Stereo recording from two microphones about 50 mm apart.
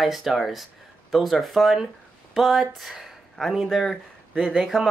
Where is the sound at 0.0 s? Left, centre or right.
Centre.